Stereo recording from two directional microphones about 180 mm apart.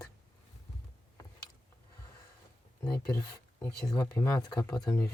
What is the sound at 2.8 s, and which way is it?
Speech, 15° left (ahead or behind).